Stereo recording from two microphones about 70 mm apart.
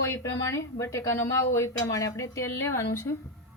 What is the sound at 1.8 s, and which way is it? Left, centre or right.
A woman's voice, left.